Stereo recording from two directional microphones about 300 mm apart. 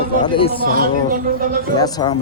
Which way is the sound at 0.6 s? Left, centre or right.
Right.